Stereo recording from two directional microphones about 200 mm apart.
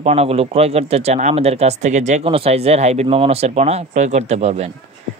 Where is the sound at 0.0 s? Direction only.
30° right (ahead or behind).